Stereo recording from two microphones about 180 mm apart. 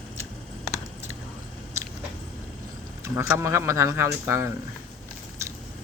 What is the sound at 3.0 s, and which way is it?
Speech, 15° right (ahead or behind).